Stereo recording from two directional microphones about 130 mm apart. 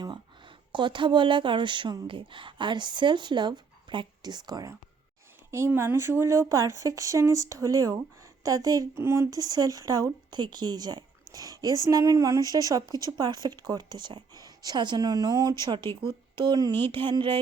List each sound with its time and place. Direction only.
0.0 s speech: 35° right (ahead or behind)
5.5 s speech: 20° right (ahead or behind); by 17.4 s 40° right (ahead or behind)